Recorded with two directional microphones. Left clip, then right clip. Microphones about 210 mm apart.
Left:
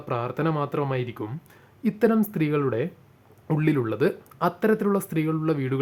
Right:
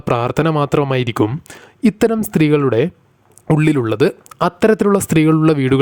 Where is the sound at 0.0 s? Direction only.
50° right (ahead or behind).